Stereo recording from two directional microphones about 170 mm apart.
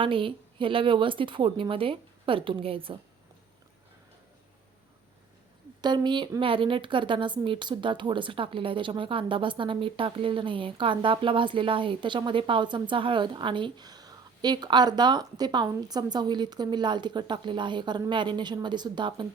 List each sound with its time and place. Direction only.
0.0 s a woman's voice: 30° right (ahead or behind)
5.8 s a woman's voice: 25° right (ahead or behind)